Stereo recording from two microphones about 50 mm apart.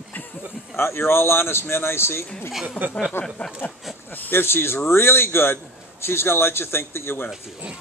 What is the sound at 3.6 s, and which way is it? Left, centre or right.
Speech, left.